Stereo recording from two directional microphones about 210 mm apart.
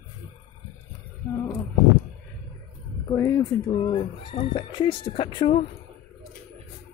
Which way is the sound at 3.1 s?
15° left (ahead or behind).